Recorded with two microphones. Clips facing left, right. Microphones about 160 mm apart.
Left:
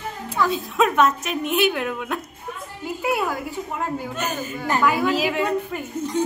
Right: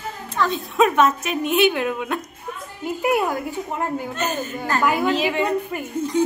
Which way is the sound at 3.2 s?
20° right (ahead or behind).